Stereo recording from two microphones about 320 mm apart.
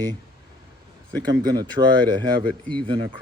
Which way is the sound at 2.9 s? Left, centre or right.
Centre.